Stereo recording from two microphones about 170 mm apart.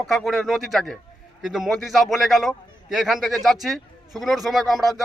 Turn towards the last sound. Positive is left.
turn(degrees=0)  # may be behind; listen again after turning